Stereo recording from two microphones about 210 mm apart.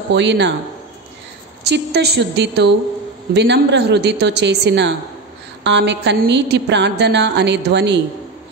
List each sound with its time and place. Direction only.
0.1 s a woman's voice: 55° right (ahead or behind)
1.6 s a woman's voice: 50° right (ahead or behind)